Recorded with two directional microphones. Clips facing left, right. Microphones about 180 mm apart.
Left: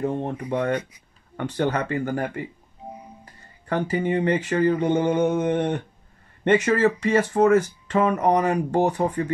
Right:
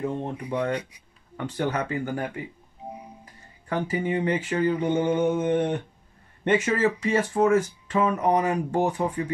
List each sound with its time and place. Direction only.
0.2 s speech: 60° left (ahead or behind)
3.6 s speech: 65° left (ahead or behind)